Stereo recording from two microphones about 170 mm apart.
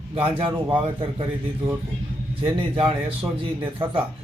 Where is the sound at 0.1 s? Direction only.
35° right (ahead or behind).